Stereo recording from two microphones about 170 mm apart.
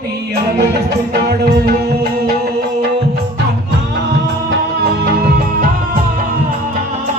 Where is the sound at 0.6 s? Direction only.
70° right (ahead or behind).